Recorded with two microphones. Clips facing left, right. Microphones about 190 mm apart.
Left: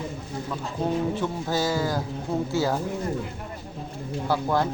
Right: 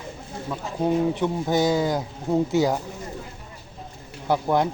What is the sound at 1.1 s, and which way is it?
Speech, 20° right (ahead or behind).